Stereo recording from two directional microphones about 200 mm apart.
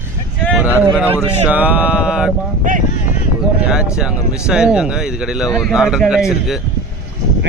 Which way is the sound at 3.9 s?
5° right (ahead or behind).